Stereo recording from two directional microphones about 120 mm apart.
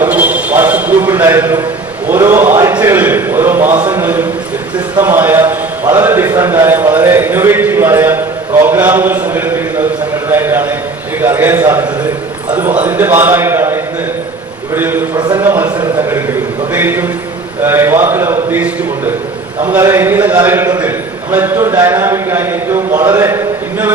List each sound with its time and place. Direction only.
0.0 s a sound: 15° right (ahead or behind)
2.0 s a man's voice: 15° right (ahead or behind)
10.2 s a sound: 15° right (ahead or behind)
11.2 s a man's voice: 15° right (ahead or behind)
14.8 s a man's voice: 15° right (ahead or behind)
15.1 s speech: 35° right (ahead or behind)
15.4 s a man's voice: 15° right (ahead or behind)
16.7 s a man's voice: 15° right (ahead or behind)
19.9 s a man's voice: 15° right (ahead or behind)